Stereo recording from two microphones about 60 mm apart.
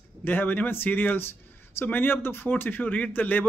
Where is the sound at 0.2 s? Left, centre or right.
Left.